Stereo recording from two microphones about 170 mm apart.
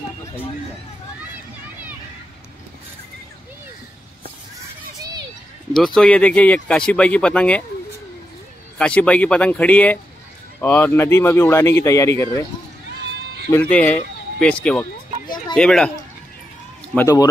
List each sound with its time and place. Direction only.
5.9 s speech: 5° left (ahead or behind)
8.7 s speech: 5° left (ahead or behind)
13.5 s speech: 10° left (ahead or behind)
16.9 s speech: 20° left (ahead or behind)